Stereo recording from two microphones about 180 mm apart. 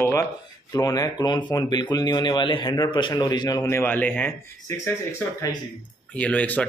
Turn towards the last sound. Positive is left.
turn(degrees=10)  # may be behind; listen again after turning